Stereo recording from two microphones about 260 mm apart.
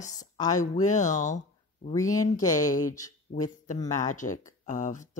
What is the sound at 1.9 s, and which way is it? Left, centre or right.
Speech, centre.